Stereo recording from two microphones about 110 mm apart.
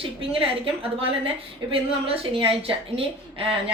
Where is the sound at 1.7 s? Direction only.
60° right (ahead or behind).